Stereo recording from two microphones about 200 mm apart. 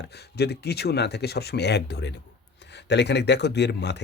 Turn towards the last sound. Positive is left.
turn(degrees=60)  # may be behind; listen again after turning